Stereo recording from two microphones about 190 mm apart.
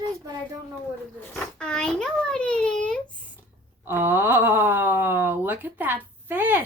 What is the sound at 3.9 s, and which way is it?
A woman's voice, 15° right (ahead or behind).